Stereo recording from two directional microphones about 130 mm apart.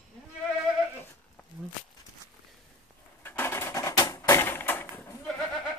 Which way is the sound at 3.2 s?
15° left (ahead or behind).